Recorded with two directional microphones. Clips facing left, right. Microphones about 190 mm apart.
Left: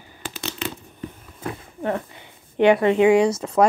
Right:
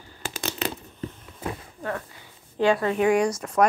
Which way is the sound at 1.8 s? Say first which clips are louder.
Left 8 dB; 20° left (ahead or behind).